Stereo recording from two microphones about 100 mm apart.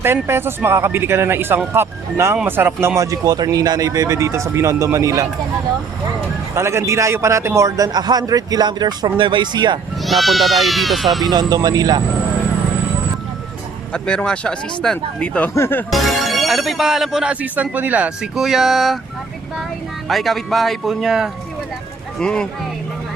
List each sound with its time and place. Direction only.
0.0 s a man's voice: 25° right (ahead or behind)
6.5 s a man's voice: 30° right (ahead or behind); by 9.8 s 50° right (ahead or behind)
10.1 s speech: centre (ahead or behind)
11.3 s a man's voice: 40° right (ahead or behind)
13.9 s speech: 10° left (ahead or behind)
15.5 s speech: 25° left (ahead or behind)
15.9 s speech: centre (ahead or behind)
17.4 s speech: 15° right (ahead or behind)
20.1 s speech: centre (ahead or behind)